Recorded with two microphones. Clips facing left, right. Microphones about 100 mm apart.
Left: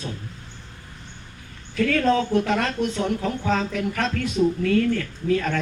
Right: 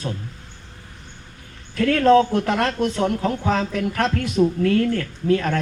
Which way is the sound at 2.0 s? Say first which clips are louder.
Right 8 dB; 60° right (ahead or behind).